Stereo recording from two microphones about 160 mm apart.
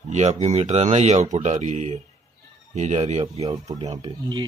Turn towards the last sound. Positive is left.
turn(degrees=-25)  # may be behind; listen again after turning